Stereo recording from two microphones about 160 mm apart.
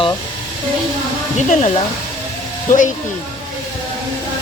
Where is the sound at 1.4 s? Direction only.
45° left (ahead or behind).